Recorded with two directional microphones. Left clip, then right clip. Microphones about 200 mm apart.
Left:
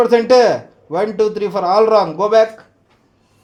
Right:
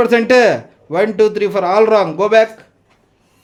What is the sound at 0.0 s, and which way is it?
Speech, 30° right (ahead or behind).